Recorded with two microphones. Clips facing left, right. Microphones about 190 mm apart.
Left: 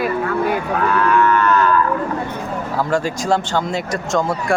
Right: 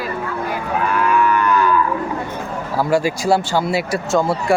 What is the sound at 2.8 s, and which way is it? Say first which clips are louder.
Speech: right 3 dB; 10° right (ahead or behind).